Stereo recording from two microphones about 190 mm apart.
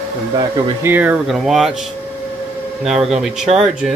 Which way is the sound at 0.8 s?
10° right (ahead or behind).